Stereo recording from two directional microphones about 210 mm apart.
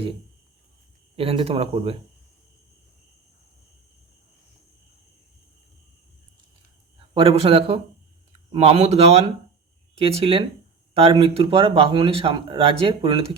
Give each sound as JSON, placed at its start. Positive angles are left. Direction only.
{"t": 1.1, "sound": "speech", "side_deg": -25}
{"t": 7.1, "sound": "speech", "side_deg": -25}